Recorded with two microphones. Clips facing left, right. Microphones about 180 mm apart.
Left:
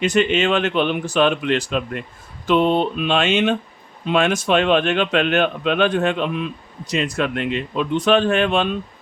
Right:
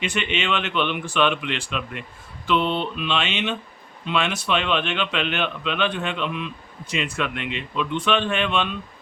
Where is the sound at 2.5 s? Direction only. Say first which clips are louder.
Left 6 dB; 45° left (ahead or behind).